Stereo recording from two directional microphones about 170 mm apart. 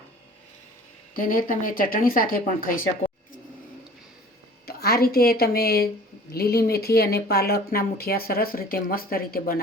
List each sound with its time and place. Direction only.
1.1 s speech: 55° left (ahead or behind)
4.6 s speech: 65° left (ahead or behind)